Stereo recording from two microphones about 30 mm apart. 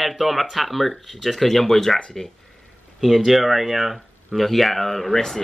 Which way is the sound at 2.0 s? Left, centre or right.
Left.